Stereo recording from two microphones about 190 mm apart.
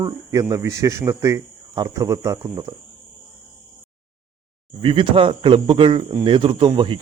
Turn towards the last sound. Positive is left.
turn(degrees=-25)  # may be behind; listen again after turning